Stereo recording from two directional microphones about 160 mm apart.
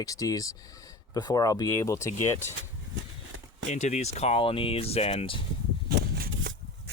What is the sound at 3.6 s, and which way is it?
Speech, 45° left (ahead or behind).